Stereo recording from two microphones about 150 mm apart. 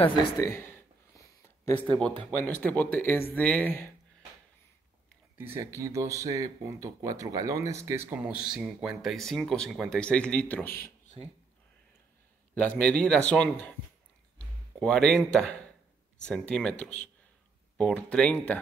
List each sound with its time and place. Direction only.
0.2 s a sound: 20° left (ahead or behind)
2.0 s speech: 10° left (ahead or behind)
5.4 s speech: 15° right (ahead or behind)
8.1 s speech: 10° right (ahead or behind); by 10.7 s 10° left (ahead or behind)
12.5 s speech: 10° left (ahead or behind)
14.8 s speech: 5° left (ahead or behind)
17.7 s speech: 5° left (ahead or behind)